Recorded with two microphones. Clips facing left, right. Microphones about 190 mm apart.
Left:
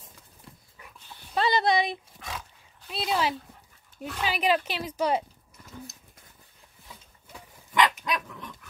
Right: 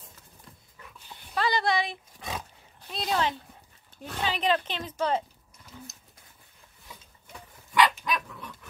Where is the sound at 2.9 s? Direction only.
5° left (ahead or behind).